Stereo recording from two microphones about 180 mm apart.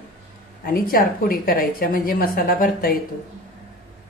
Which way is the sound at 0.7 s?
55° left (ahead or behind).